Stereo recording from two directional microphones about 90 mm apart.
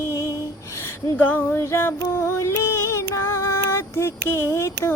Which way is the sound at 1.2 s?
20° left (ahead or behind).